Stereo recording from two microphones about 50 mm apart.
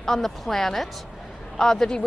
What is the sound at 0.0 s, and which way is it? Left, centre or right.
Speech, centre.